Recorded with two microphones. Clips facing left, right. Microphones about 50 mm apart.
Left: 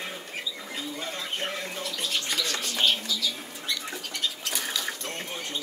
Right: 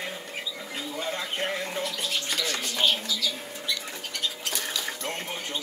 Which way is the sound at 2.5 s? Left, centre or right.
Centre.